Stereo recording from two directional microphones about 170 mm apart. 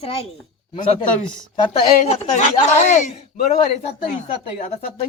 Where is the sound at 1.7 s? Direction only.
35° left (ahead or behind).